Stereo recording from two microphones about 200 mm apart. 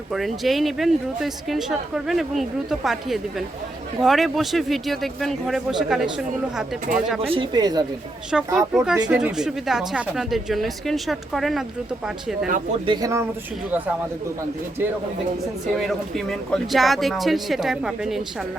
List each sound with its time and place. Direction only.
0.1 s a man's voice: centre (ahead or behind)
7.3 s a woman's voice: 20° right (ahead or behind)
8.5 s a man's voice: centre (ahead or behind)
12.8 s speech: 20° right (ahead or behind)
15.8 s a man's voice: centre (ahead or behind)